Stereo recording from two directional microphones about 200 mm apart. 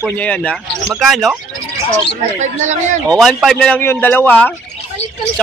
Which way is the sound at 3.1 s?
Centre (ahead or behind).